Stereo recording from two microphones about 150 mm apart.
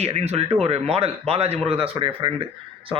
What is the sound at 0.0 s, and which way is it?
Speech, 45° right (ahead or behind).